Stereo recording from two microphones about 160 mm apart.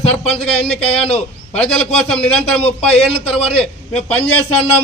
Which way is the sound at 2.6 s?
40° left (ahead or behind).